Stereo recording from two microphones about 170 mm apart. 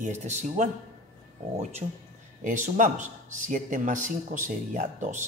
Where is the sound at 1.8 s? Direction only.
35° right (ahead or behind).